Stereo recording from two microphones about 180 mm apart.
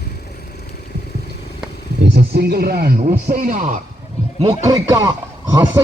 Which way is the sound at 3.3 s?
45° right (ahead or behind).